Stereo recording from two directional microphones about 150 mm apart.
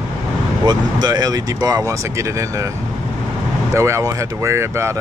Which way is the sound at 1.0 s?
25° right (ahead or behind).